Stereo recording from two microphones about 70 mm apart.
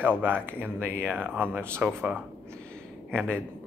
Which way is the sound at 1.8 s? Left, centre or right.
Centre.